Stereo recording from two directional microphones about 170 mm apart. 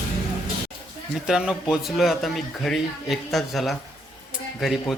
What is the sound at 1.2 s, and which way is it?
Speech, 5° right (ahead or behind).